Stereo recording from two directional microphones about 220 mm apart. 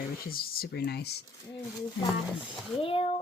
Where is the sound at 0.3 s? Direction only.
40° left (ahead or behind).